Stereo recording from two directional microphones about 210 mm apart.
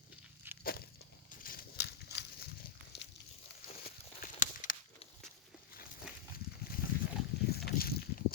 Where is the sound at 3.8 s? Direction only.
40° left (ahead or behind).